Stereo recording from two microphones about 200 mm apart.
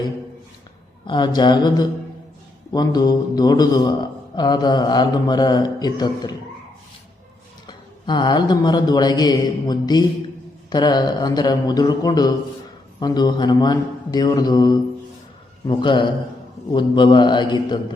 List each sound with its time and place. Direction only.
1.0 s a man's voice: 20° left (ahead or behind)
7.7 s a man's voice: 20° left (ahead or behind)